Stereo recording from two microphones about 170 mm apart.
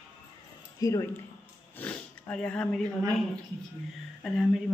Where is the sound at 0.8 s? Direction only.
20° left (ahead or behind).